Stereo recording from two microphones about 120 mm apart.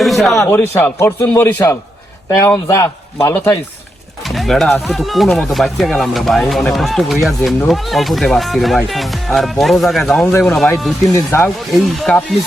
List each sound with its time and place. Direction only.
0.0 s a sound: centre (ahead or behind)
0.4 s a man's voice: 15° left (ahead or behind)
2.6 s a man's voice: 25° left (ahead or behind)
4.2 s speech: centre (ahead or behind)
11.1 s a man's voice: 25° left (ahead or behind)
11.4 s speech: centre (ahead or behind)